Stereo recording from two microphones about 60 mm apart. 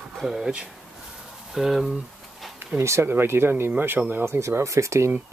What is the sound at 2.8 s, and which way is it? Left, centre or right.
Speech, right.